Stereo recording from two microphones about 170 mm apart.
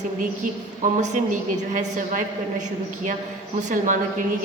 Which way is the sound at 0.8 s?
50° right (ahead or behind).